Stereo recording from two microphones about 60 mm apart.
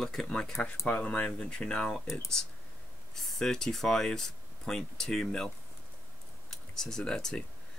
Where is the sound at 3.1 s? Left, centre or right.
Centre.